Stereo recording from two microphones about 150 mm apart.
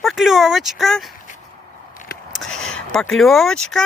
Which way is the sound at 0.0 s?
Centre (ahead or behind).